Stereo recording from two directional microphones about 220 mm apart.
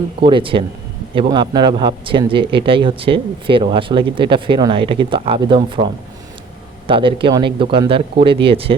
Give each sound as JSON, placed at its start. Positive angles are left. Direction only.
{"t": 0.2, "sound": "speech", "side_deg": -25}